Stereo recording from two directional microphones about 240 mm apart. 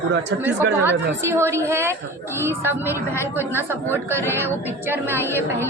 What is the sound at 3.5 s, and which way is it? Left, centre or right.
Speech, centre.